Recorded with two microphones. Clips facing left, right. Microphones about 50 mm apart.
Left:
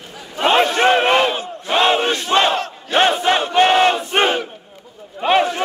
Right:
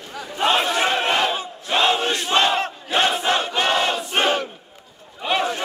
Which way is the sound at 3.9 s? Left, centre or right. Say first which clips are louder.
Left 3 dB; left.